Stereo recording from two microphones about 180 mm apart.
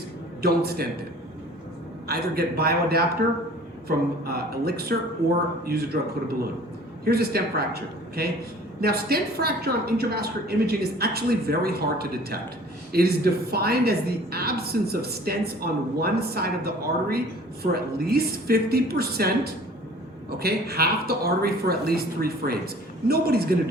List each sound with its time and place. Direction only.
0.4 s a woman's voice: 60° right (ahead or behind)
2.0 s a woman's voice: 60° right (ahead or behind)
20.4 s a woman's voice: 60° right (ahead or behind)